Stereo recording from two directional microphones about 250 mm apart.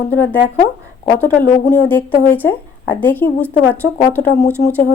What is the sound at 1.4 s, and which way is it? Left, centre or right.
Speech, left.